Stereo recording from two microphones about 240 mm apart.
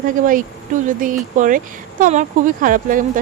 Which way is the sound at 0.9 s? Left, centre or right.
Right.